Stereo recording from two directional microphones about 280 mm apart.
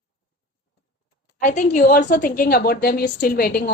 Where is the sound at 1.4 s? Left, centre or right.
Left.